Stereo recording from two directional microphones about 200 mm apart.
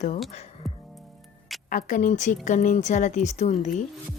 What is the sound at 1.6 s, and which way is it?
Speech, 40° left (ahead or behind).